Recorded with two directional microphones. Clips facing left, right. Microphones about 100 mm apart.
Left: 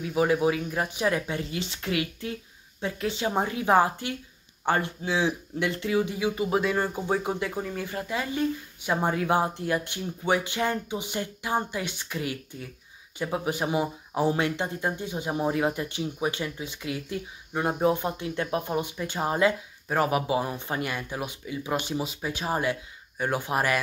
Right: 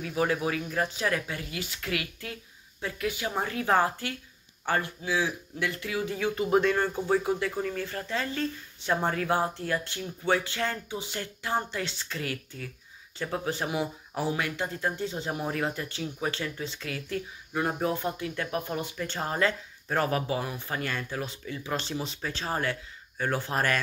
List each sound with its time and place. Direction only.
0.0 s speech: 20° left (ahead or behind)
6.1 s speech: 10° left (ahead or behind)